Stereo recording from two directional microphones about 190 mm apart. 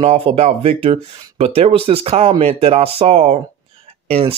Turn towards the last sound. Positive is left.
turn(degrees=-30)  # may be behind; listen again after turning